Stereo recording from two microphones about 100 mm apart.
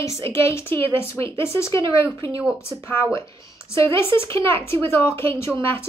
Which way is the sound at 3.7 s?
25° left (ahead or behind).